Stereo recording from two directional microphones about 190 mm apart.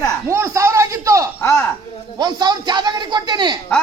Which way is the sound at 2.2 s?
20° right (ahead or behind).